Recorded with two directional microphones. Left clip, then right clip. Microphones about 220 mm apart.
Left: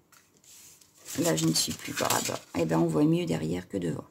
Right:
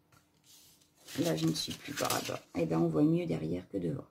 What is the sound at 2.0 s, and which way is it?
Speech, 40° left (ahead or behind).